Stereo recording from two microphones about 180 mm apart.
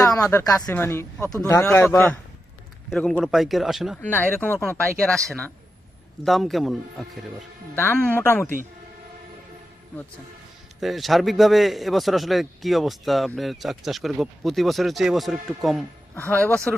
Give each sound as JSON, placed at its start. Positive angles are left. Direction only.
{"t": 0.2, "sound": "a man's voice", "side_deg": 15}
{"t": 4.0, "sound": "a man's voice", "side_deg": 10}
{"t": 7.8, "sound": "speech", "side_deg": 10}
{"t": 10.8, "sound": "a man's voice", "side_deg": 0}